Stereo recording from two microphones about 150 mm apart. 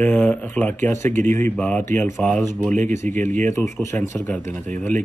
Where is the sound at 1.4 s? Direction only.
10° left (ahead or behind).